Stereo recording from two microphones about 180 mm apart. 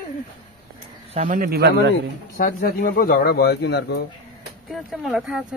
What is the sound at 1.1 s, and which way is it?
Speech, 45° right (ahead or behind).